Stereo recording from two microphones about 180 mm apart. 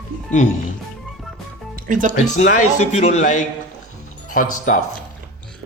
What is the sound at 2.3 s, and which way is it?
Speech, 40° left (ahead or behind).